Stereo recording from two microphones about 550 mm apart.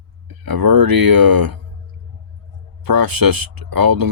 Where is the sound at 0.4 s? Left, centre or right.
Right.